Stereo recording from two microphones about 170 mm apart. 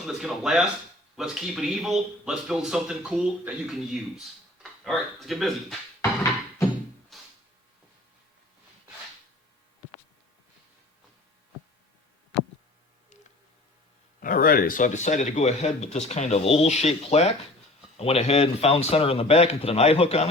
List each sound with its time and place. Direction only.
0.0 s speech: centre (ahead or behind)
7.1 s a sound: centre (ahead or behind)
14.2 s speech: 55° left (ahead or behind); by 20.2 s 35° left (ahead or behind)